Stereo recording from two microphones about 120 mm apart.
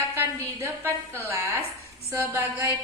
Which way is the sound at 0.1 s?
20° right (ahead or behind).